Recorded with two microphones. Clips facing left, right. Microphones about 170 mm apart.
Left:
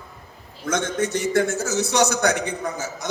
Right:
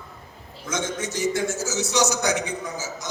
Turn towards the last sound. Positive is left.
turn(degrees=60)  # may be behind; listen again after turning